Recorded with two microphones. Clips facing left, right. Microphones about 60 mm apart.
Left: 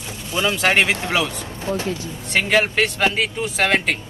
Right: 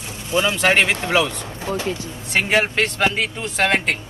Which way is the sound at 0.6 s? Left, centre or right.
Centre.